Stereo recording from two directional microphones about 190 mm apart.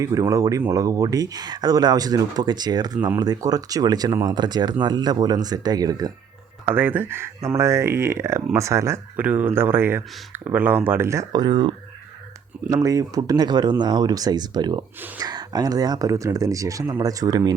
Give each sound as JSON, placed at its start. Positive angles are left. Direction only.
{"t": 0.0, "sound": "speech", "side_deg": -15}